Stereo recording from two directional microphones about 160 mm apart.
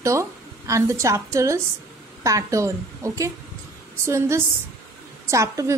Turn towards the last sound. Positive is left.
turn(degrees=-20)  # may be behind; listen again after turning